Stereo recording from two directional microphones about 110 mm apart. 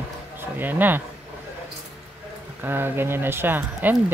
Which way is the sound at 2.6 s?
20° right (ahead or behind).